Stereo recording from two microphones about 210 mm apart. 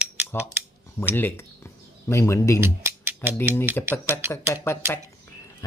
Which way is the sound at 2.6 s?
10° right (ahead or behind).